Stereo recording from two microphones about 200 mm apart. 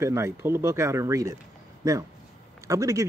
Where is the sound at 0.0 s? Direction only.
15° right (ahead or behind).